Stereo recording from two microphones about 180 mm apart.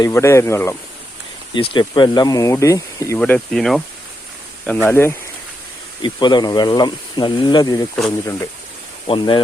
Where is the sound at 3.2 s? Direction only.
5° left (ahead or behind).